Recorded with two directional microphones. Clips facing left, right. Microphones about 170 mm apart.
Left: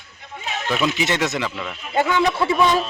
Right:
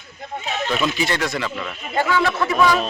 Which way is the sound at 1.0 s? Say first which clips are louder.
Left 1 dB; 20° left (ahead or behind).